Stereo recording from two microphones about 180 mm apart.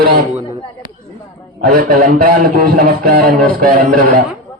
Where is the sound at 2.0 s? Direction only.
50° right (ahead or behind).